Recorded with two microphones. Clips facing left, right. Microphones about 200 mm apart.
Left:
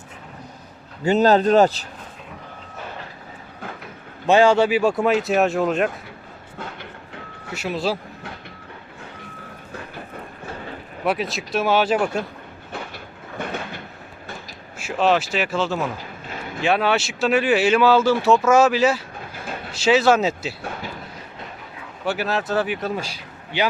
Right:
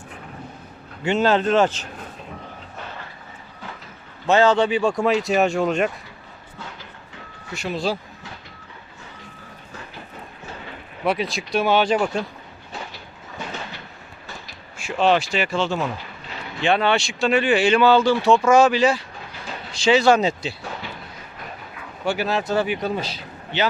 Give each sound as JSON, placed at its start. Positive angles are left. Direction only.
{"t": 1.0, "sound": "speech", "side_deg": 40}
{"t": 4.3, "sound": "speech", "side_deg": 10}
{"t": 7.5, "sound": "speech", "side_deg": 5}
{"t": 11.0, "sound": "speech", "side_deg": 5}
{"t": 12.7, "sound": "train", "side_deg": 55}
{"t": 14.8, "sound": "speech", "side_deg": 5}
{"t": 16.2, "sound": "a sound", "side_deg": 50}
{"t": 16.6, "sound": "speech", "side_deg": 5}
{"t": 19.3, "sound": "train", "side_deg": 50}
{"t": 19.7, "sound": "speech", "side_deg": 5}
{"t": 22.0, "sound": "speech", "side_deg": 5}